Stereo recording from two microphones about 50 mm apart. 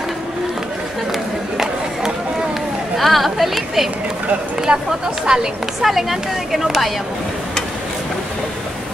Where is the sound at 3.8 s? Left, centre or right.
Right.